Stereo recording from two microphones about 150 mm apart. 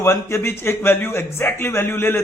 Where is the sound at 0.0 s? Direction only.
20° left (ahead or behind).